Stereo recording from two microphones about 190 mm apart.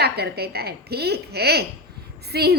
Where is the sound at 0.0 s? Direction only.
55° right (ahead or behind).